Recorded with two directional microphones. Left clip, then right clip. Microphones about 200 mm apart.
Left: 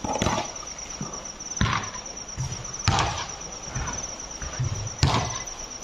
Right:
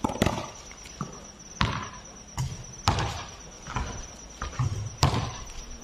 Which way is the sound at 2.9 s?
15° right (ahead or behind).